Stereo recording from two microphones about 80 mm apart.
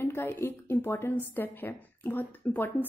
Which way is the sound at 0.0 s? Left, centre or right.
Left.